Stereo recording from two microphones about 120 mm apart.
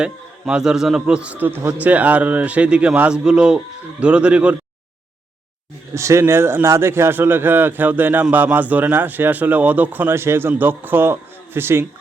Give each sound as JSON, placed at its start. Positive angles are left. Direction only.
{"t": 0.0, "sound": "a man's voice", "side_deg": -5}
{"t": 5.9, "sound": "a man's voice", "side_deg": -25}